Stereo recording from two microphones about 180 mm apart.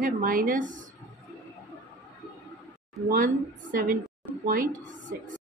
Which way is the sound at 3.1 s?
50° right (ahead or behind).